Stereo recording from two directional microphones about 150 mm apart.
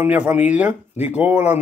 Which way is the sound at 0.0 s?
10° right (ahead or behind).